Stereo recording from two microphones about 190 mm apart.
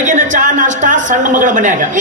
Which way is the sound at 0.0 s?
40° right (ahead or behind).